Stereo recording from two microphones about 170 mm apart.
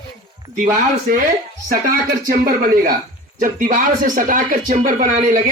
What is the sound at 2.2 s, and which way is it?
Speech, 60° right (ahead or behind).